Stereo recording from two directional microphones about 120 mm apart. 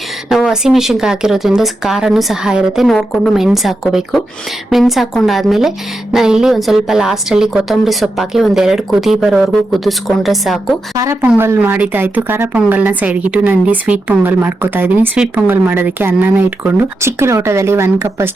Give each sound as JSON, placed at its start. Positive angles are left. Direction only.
{"t": 0.3, "sound": "a woman's voice", "side_deg": -5}
{"t": 10.9, "sound": "speech", "side_deg": -25}